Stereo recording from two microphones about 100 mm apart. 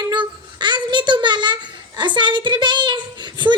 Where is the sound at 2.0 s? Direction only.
50° right (ahead or behind).